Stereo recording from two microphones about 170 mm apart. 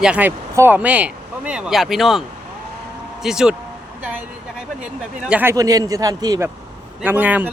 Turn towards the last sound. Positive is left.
turn(degrees=-10)  # may be behind; listen again after turning